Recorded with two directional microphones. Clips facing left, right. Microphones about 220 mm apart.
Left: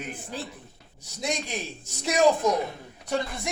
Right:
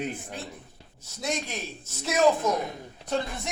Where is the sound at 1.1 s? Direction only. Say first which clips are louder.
Left 1 dB; 15° left (ahead or behind).